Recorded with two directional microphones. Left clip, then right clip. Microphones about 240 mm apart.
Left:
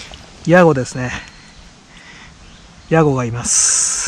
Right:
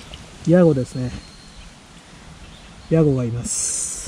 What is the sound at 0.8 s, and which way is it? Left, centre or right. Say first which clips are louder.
Speech: left 7 dB; centre.